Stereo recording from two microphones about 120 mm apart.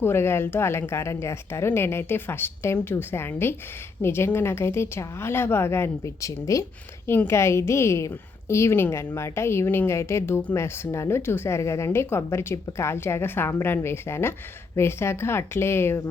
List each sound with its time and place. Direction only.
0.0 s a woman's voice: 20° left (ahead or behind)